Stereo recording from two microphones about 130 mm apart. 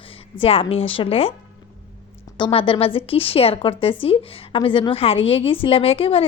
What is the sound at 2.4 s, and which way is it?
Speech, 40° left (ahead or behind).